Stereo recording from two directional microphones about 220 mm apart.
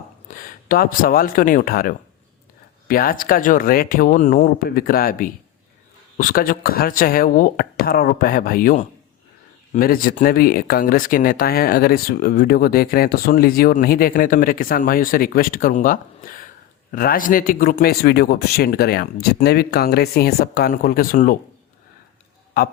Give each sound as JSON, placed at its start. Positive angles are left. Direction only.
{"t": 0.3, "sound": "a man's voice", "side_deg": 40}